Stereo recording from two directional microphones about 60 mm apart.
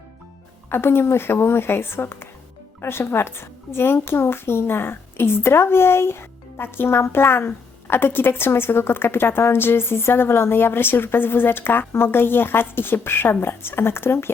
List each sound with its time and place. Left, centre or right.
0.7 s a woman's voice: left